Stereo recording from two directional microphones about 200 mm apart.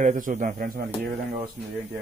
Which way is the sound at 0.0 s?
40° right (ahead or behind).